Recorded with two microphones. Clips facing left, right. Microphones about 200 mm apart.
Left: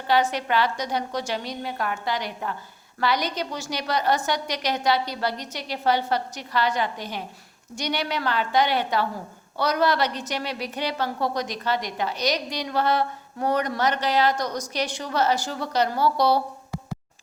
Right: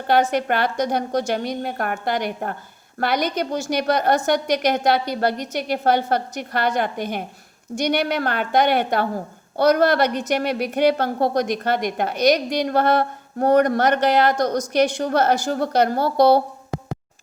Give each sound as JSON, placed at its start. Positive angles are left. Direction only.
{"t": 0.1, "sound": "a woman's voice", "side_deg": -50}